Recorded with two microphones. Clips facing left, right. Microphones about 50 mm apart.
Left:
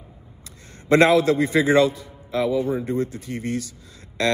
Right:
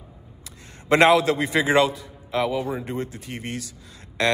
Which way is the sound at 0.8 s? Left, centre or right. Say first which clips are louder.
Left 1 dB; right.